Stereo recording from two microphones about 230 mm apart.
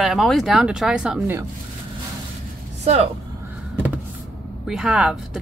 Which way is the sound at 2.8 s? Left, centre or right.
Right.